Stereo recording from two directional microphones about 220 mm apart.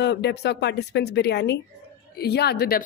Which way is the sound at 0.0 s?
50° left (ahead or behind).